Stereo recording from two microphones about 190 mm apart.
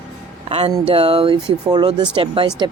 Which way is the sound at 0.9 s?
30° right (ahead or behind).